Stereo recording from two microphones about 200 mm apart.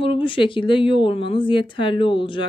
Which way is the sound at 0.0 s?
25° left (ahead or behind).